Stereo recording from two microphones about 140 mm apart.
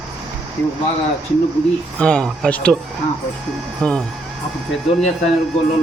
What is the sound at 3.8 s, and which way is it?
Speech, 5° left (ahead or behind).